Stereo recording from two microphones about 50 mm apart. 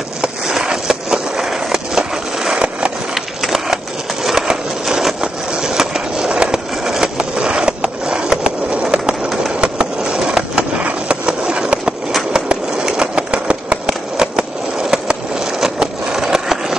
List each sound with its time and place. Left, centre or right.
0.2 s skateboard: centre
2.5 s skateboard: right
3.2 s a sound: centre
9.6 s train: centre
10.8 s skateboard: right
12.3 s a sound: centre